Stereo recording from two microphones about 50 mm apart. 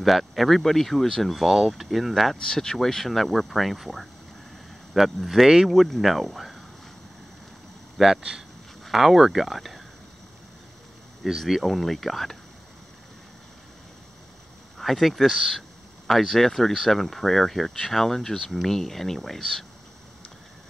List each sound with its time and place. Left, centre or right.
0.0 s speech: centre
2.4 s speech: centre
8.2 s speech: centre
11.2 s speech: centre
14.8 s speech: centre